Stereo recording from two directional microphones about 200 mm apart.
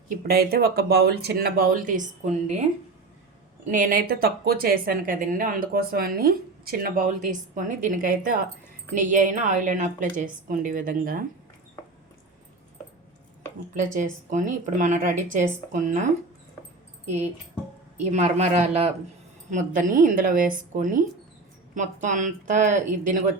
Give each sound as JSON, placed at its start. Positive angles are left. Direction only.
{"t": 0.2, "sound": "a woman's voice", "side_deg": -50}
{"t": 3.7, "sound": "a woman's voice", "side_deg": -45}
{"t": 13.9, "sound": "a woman's voice", "side_deg": -40}
{"t": 18.1, "sound": "a woman's voice", "side_deg": -35}